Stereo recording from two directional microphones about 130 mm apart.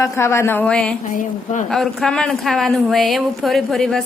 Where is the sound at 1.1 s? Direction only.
90° left.